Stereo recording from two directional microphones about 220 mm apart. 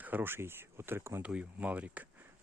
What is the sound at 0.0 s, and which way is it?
Speech, 10° right (ahead or behind).